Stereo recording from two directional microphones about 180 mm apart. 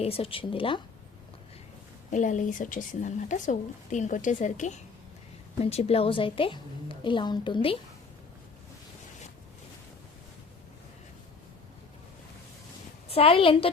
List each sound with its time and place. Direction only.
0.0 s speech: 30° left (ahead or behind)
2.0 s a woman's voice: 45° left (ahead or behind); by 7.8 s 30° left (ahead or behind)
13.1 s a woman's voice: 35° left (ahead or behind)